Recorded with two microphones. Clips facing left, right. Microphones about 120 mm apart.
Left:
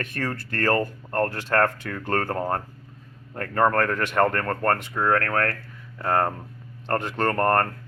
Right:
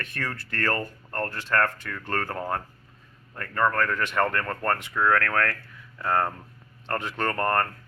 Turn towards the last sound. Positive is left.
turn(degrees=40)  # may be behind; listen again after turning